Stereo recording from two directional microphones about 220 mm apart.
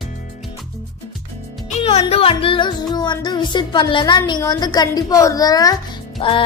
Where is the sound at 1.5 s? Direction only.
Centre (ahead or behind).